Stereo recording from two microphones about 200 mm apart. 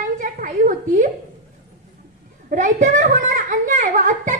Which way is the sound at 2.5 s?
40° right (ahead or behind).